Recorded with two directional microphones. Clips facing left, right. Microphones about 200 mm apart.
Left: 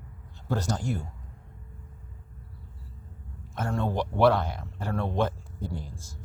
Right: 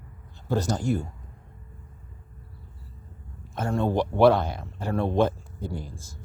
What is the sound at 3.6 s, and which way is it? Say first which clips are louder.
Speech: right 4 dB; 20° right (ahead or behind).